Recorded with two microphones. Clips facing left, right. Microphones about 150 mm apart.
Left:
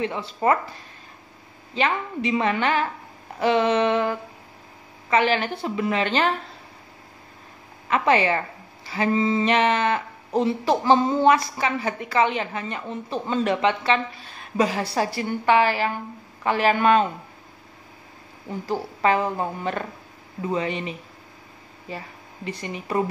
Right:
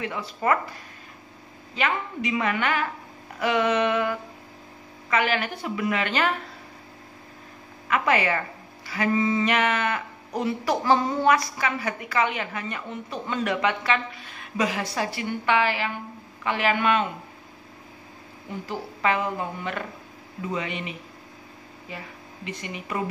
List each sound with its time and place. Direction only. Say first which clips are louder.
0.0 s speech: left 4 dB; 30° left (ahead or behind)
1.8 s speech: left 3 dB; 30° left (ahead or behind)
7.9 s a woman's voice: left 3 dB; 30° left (ahead or behind)
18.7 s a woman's voice: left 4 dB; 35° left (ahead or behind)
21.9 s speech: left 3 dB; 35° left (ahead or behind)